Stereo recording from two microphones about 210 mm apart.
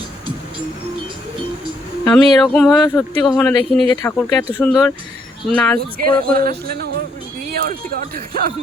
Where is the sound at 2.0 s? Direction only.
5° left (ahead or behind).